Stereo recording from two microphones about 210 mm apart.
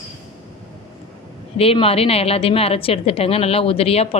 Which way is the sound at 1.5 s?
30° left (ahead or behind).